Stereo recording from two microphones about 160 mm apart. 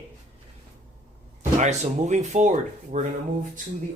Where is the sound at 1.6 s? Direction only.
45° right (ahead or behind).